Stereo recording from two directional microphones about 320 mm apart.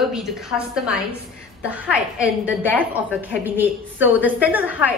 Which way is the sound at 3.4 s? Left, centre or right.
Centre.